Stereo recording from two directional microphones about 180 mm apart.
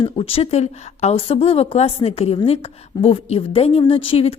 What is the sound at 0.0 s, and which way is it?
A woman's voice, 30° left (ahead or behind).